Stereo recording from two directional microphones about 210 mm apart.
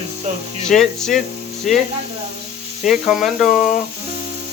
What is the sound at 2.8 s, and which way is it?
Speech, centre (ahead or behind).